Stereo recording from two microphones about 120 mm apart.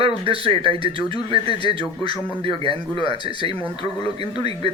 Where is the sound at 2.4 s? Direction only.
45° right (ahead or behind).